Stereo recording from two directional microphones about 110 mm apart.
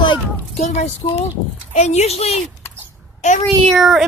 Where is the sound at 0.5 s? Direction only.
90° left; by 2.4 s 70° left (ahead or behind).